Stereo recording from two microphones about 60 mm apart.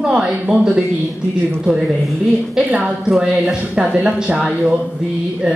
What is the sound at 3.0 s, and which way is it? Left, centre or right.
Speech, centre.